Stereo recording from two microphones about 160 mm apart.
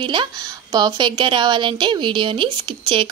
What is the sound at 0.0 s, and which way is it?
A woman's voice, 30° right (ahead or behind).